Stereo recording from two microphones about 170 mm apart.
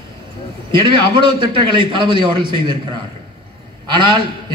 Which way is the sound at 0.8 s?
30° right (ahead or behind).